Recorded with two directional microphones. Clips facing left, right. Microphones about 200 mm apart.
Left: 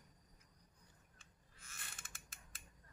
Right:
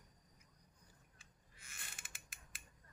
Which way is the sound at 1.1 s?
10° right (ahead or behind).